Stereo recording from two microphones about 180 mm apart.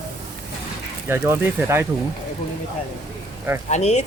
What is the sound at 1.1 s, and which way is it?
Speech, 15° right (ahead or behind).